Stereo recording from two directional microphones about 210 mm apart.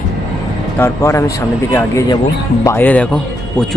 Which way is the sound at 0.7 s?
10° left (ahead or behind).